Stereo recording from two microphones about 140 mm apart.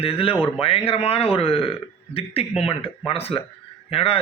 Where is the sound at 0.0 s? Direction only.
40° left (ahead or behind).